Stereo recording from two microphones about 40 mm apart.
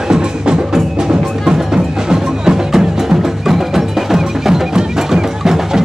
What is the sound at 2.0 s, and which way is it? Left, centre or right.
Music, centre.